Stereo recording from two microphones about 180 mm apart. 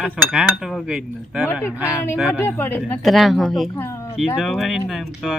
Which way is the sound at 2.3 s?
10° left (ahead or behind).